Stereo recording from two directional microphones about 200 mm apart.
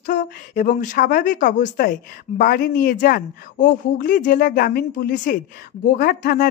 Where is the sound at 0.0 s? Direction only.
45° left (ahead or behind).